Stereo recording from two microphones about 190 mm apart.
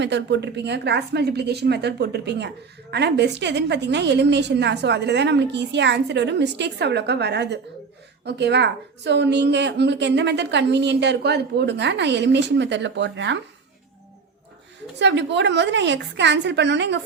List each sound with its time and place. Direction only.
0.0 s a woman's voice: 65° right (ahead or behind)
14.9 s a woman's voice: 65° right (ahead or behind)